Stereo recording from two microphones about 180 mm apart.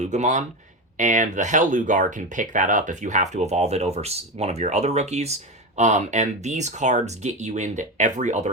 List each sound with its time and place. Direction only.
0.0 s speech: 40° right (ahead or behind)